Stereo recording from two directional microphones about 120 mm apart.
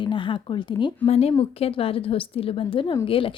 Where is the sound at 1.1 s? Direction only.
55° left (ahead or behind).